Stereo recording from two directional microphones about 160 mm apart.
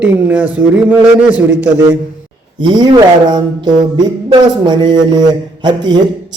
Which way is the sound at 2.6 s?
30° right (ahead or behind).